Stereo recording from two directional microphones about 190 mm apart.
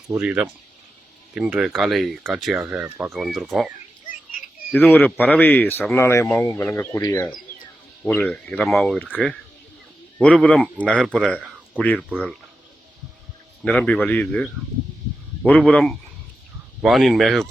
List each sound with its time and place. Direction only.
0.1 s speech: 5° right (ahead or behind)
4.7 s speech: 10° left (ahead or behind)
10.2 s speech: 5° left (ahead or behind)
13.7 s speech: 5° left (ahead or behind)